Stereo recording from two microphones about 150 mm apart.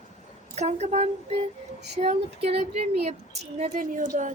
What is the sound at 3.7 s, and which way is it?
Speech, 65° right (ahead or behind).